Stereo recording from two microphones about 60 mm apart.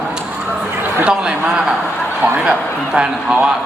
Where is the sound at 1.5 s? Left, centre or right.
Centre.